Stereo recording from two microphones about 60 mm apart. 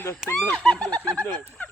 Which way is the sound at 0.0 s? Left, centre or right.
Left.